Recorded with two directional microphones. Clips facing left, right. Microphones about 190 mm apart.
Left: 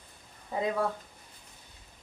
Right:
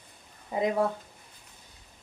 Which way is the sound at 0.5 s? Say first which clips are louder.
Right 4 dB; 15° right (ahead or behind).